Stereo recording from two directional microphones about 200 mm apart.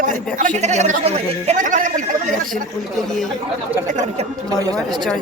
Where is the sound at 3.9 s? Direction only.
35° right (ahead or behind).